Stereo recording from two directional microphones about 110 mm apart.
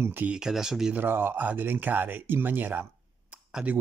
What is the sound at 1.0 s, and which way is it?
Speech, 20° right (ahead or behind).